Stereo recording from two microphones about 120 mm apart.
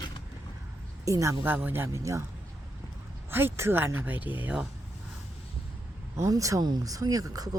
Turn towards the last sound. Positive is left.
turn(degrees=-30)  # may be behind; listen again after turning